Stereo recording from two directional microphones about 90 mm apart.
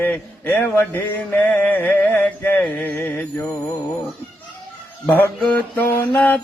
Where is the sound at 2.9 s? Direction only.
25° left (ahead or behind).